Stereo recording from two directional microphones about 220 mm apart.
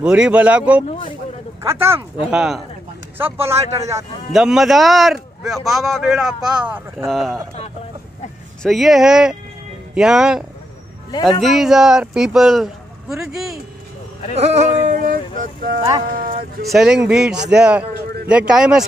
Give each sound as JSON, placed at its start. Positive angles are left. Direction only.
{"t": 0.0, "sound": "a man's voice", "side_deg": -5}
{"t": 4.3, "sound": "a man's voice", "side_deg": 0}
{"t": 8.6, "sound": "a man's voice", "side_deg": 0}
{"t": 11.4, "sound": "a man's voice", "side_deg": 0}
{"t": 14.3, "sound": "speech", "side_deg": -30}
{"t": 16.6, "sound": "a man's voice", "side_deg": 0}